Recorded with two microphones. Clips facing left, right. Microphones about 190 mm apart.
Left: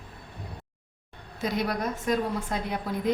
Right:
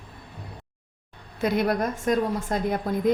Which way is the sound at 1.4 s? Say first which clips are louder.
Right 5 dB; 55° right (ahead or behind).